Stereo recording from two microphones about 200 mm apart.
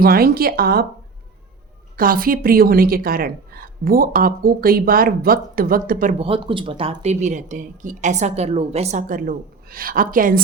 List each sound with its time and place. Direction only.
0.0 s a woman's voice: 50° right (ahead or behind)
2.0 s a woman's voice: 45° right (ahead or behind)
6.1 s speech: 25° right (ahead or behind); by 10.4 s 45° right (ahead or behind)